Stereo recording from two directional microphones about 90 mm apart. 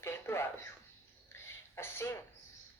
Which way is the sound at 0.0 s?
30° left (ahead or behind).